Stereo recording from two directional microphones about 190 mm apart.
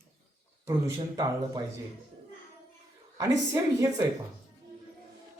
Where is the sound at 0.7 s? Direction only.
20° right (ahead or behind).